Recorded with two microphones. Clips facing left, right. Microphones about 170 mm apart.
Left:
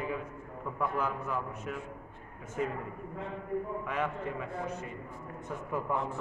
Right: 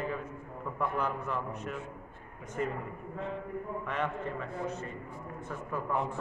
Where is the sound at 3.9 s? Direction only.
10° left (ahead or behind).